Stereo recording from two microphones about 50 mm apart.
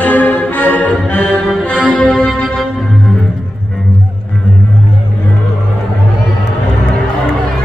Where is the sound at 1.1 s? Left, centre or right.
Centre.